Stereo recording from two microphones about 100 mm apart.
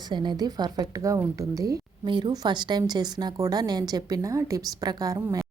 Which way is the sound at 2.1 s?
50° right (ahead or behind).